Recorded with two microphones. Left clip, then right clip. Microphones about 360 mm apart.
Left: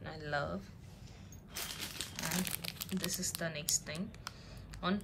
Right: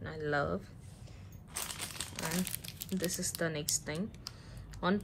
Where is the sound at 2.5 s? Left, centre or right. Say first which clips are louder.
Left 1 dB; centre.